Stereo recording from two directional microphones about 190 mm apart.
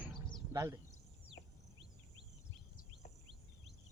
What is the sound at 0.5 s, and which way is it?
Speech, 15° right (ahead or behind).